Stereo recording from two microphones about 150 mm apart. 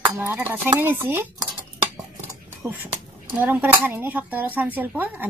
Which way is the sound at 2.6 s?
10° right (ahead or behind).